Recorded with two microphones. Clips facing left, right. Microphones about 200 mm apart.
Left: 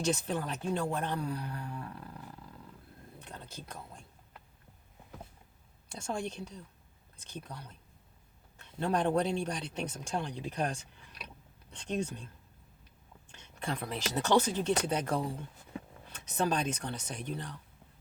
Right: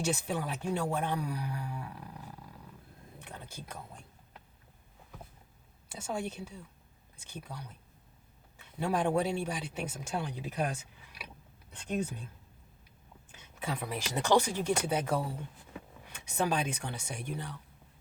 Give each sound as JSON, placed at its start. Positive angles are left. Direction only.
{"t": 0.0, "sound": "speech", "side_deg": -10}
{"t": 3.2, "sound": "a sound", "side_deg": -10}
{"t": 5.9, "sound": "speech", "side_deg": -10}